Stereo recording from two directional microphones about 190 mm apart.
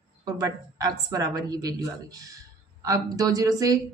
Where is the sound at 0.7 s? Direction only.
20° right (ahead or behind).